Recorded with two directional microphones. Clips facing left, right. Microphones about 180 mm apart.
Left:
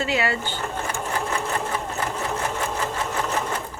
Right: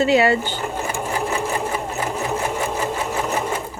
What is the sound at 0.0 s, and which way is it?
Speech, 25° right (ahead or behind).